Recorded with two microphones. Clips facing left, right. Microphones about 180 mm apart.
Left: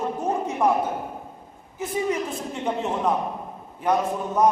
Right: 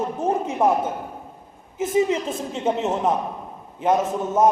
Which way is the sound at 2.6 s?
20° right (ahead or behind).